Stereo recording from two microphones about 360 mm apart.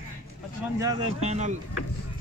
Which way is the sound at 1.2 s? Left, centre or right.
Centre.